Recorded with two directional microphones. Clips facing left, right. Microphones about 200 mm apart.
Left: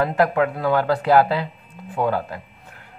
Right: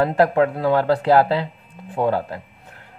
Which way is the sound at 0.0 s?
30° right (ahead or behind).